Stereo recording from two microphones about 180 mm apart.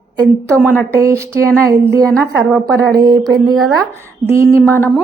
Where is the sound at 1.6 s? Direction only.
15° right (ahead or behind).